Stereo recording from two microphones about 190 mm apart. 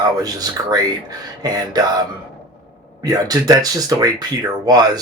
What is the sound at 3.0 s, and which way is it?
Speech, 20° right (ahead or behind).